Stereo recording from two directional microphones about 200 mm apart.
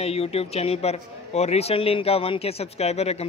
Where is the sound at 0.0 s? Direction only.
30° left (ahead or behind).